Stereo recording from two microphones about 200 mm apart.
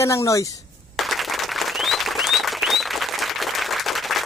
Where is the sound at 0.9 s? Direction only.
Centre (ahead or behind).